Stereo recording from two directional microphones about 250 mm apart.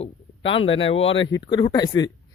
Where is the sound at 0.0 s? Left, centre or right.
Left.